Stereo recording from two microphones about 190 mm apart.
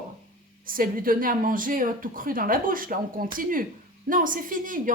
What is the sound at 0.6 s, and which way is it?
A woman's voice, 45° right (ahead or behind).